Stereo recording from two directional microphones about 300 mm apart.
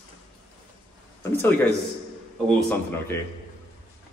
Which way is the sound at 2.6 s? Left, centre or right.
Centre.